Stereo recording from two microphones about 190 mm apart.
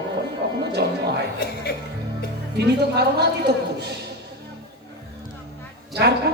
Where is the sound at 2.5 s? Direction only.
60° right (ahead or behind).